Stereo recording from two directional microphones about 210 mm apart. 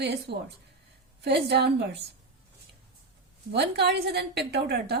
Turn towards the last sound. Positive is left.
turn(degrees=-50)  # may be behind; listen again after turning